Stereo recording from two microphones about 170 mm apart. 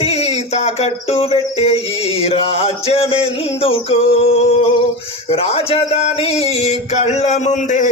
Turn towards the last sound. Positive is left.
turn(degrees=45)  # may be behind; listen again after turning